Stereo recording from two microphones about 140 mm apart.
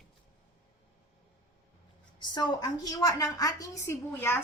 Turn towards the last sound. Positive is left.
turn(degrees=15)  # may be behind; listen again after turning